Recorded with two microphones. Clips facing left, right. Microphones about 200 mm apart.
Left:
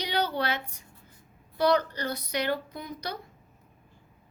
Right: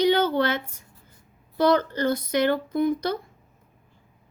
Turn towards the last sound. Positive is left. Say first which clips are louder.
# right 14 dB
turn(degrees=-50)  # may be behind; listen again after turning